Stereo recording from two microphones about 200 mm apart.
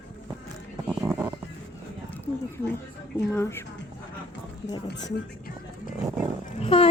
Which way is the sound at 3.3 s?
10° left (ahead or behind).